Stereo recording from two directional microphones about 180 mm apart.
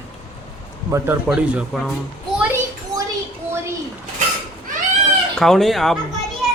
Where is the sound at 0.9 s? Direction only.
10° right (ahead or behind).